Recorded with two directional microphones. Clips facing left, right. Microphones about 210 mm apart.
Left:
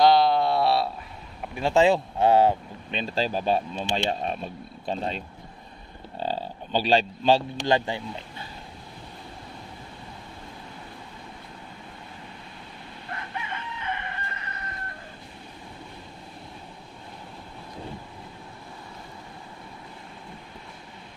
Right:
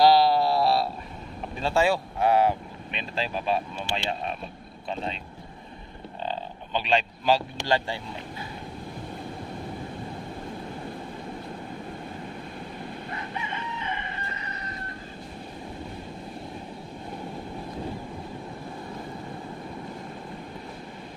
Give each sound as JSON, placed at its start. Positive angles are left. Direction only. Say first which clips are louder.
{"t": 0.0, "sound": "a sound", "louder": "even", "side_deg": -5}
{"t": 1.5, "sound": "speech", "louder": "left 4 dB", "side_deg": 15}
{"t": 6.2, "sound": "speech", "louder": "left 3 dB", "side_deg": 35}
{"t": 13.1, "sound": "chicken", "louder": "left 3 dB", "side_deg": 55}